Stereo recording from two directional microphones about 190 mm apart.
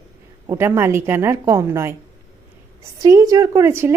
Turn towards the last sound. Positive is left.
turn(degrees=-15)  # may be behind; listen again after turning